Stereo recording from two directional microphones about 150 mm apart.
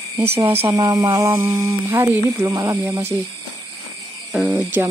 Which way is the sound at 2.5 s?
30° right (ahead or behind).